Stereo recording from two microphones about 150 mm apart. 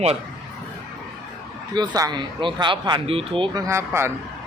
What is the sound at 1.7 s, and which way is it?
Speech, 25° right (ahead or behind).